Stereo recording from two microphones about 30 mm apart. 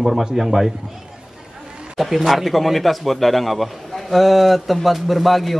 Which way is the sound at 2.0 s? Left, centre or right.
Centre.